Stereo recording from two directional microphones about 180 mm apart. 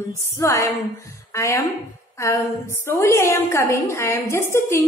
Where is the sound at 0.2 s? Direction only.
15° left (ahead or behind).